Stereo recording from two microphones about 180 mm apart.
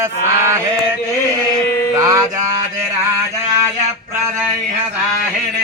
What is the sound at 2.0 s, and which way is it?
Mantra, 20° right (ahead or behind).